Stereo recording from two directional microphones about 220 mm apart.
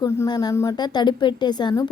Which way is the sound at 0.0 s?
15° left (ahead or behind).